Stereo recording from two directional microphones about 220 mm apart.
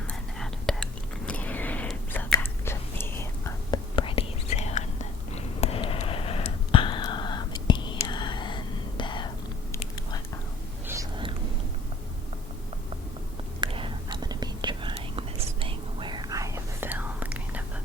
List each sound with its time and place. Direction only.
0.1 s whispering: 5° left (ahead or behind)
3.9 s whispering: 25° left (ahead or behind)
5.3 s a sound: 30° left (ahead or behind)
13.6 s whispering: 25° right (ahead or behind); by 17.6 s 5° right (ahead or behind)